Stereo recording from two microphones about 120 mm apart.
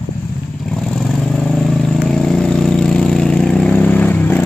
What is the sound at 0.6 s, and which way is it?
Vehicle, centre (ahead or behind).